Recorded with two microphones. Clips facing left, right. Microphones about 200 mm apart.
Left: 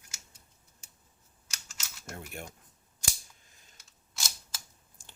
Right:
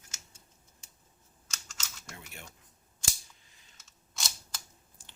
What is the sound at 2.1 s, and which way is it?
Speech, 50° left (ahead or behind).